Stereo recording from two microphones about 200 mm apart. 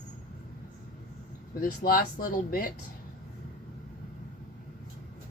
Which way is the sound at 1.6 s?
45° left (ahead or behind).